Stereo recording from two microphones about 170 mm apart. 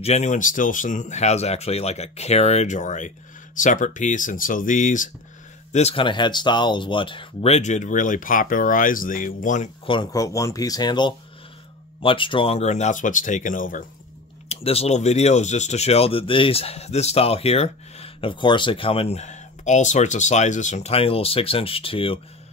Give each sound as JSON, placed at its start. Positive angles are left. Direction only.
{"t": 0.0, "sound": "speech", "side_deg": 40}
{"t": 9.8, "sound": "speech", "side_deg": 25}
{"t": 14.5, "sound": "speech", "side_deg": 35}